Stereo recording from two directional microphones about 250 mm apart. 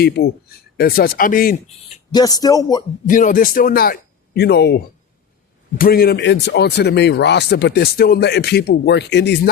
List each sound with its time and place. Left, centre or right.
0.0 s speech: left
2.1 s speech: centre
3.1 s speech: left